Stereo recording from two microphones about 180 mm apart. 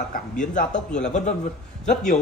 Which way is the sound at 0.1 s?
45° left (ahead or behind).